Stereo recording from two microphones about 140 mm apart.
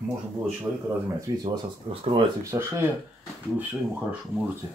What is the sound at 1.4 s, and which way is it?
Speech, 35° right (ahead or behind).